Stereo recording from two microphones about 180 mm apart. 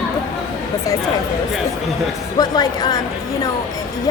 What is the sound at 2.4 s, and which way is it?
Speech, 20° left (ahead or behind).